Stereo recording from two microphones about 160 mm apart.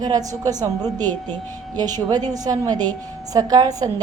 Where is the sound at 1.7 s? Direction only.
25° right (ahead or behind).